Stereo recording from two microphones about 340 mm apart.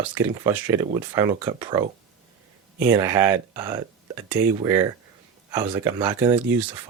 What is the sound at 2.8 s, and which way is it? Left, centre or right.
Speech, centre.